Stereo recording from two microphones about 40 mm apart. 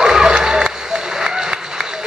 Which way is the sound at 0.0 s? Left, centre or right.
Centre.